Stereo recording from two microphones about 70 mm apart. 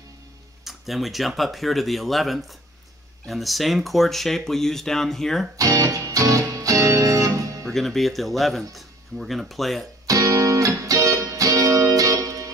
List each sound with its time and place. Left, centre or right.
0.7 s speech: centre
5.6 s music: right
7.6 s speech: centre
10.0 s music: right